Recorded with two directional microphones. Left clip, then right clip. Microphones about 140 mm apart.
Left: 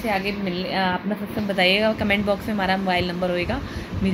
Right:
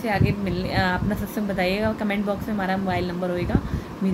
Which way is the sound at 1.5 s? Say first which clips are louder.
Left 5 dB; centre (ahead or behind).